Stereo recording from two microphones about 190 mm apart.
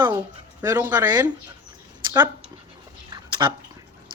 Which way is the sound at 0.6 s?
10° right (ahead or behind).